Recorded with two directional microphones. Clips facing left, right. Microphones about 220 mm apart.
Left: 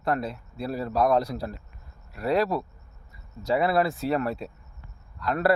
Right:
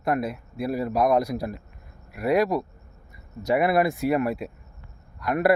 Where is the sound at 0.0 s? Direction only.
10° right (ahead or behind).